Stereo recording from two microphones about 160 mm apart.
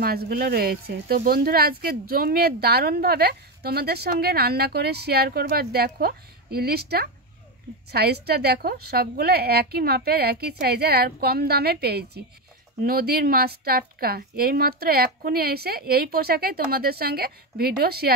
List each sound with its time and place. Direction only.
0.0 s a woman's voice: 75° right (ahead or behind); by 12.2 s 90° right
12.8 s speech: 70° right (ahead or behind)